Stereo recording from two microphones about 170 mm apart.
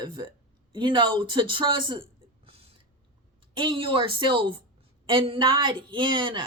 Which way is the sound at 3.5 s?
30° right (ahead or behind).